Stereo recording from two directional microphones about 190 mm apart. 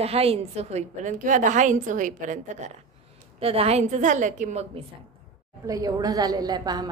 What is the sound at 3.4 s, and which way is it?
A woman's voice, 30° right (ahead or behind).